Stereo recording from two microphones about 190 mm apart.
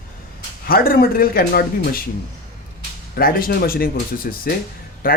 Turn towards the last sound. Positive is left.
turn(degrees=50)  # may be behind; listen again after turning